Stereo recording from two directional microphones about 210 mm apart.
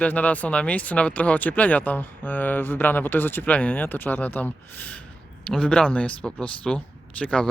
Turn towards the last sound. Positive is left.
turn(degrees=5)  # may be behind; listen again after turning